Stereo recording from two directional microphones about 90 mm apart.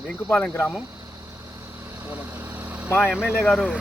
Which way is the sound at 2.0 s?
25° right (ahead or behind).